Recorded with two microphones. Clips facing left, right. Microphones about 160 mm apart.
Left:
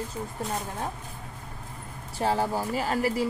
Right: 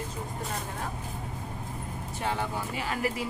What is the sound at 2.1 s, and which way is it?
Speech, 35° left (ahead or behind).